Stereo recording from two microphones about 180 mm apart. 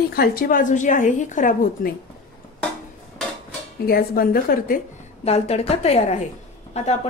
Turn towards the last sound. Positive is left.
turn(degrees=35)  # may be behind; listen again after turning